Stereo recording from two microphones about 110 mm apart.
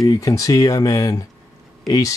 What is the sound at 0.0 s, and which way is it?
Speech, 30° left (ahead or behind).